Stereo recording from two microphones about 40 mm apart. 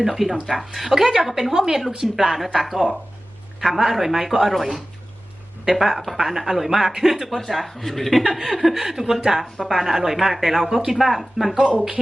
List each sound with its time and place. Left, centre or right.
0.0 s a woman's voice: centre
11.5 s speech: right